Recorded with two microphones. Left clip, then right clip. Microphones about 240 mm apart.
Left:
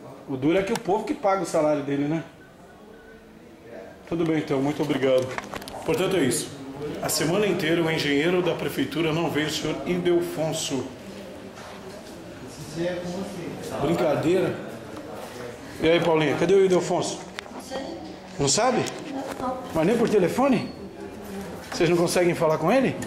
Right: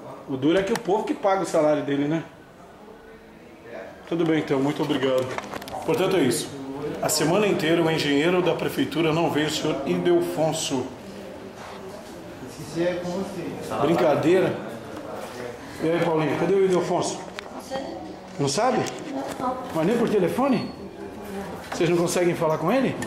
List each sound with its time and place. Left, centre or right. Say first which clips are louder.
0.4 s speech: right 1 dB; centre
4.3 s speech: right 2 dB; centre
4.7 s speech: left 1 dB; right
5.7 s a man's voice: right 2 dB; centre
13.8 s speech: right 3 dB; centre
15.8 s speech: left 2 dB; centre
18.4 s speech: even; centre
21.6 s speech: left 1 dB; centre